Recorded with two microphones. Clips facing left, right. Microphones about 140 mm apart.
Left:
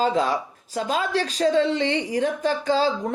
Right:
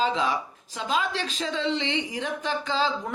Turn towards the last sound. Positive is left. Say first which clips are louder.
# left 5 dB
turn(degrees=45)  # may be behind; listen again after turning